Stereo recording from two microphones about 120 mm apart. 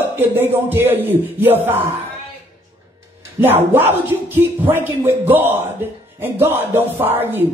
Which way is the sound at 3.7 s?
15° right (ahead or behind).